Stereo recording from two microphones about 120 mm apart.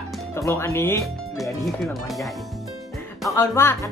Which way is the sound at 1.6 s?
Centre (ahead or behind).